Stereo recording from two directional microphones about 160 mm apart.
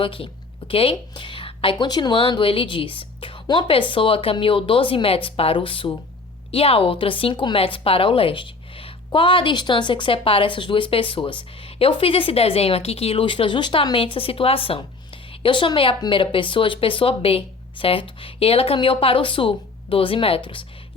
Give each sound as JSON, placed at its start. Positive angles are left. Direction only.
{"t": 0.0, "sound": "speech", "side_deg": 35}